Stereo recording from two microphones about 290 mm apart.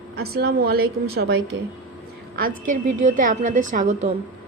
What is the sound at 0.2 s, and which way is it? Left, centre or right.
Speech, right.